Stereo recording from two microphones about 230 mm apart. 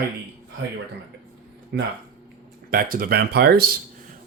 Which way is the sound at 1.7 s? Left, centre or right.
Right.